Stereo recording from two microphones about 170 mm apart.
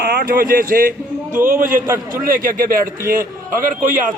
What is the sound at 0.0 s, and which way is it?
Speech, 65° right (ahead or behind).